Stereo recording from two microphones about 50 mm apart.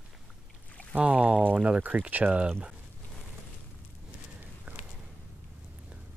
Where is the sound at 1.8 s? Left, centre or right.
Right.